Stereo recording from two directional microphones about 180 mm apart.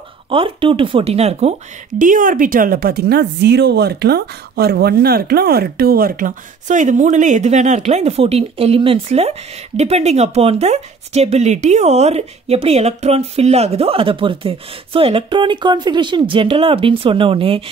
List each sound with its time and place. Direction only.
0.3 s speech: 30° right (ahead or behind)
2.0 s speech: 50° right (ahead or behind); by 17.6 s 30° right (ahead or behind)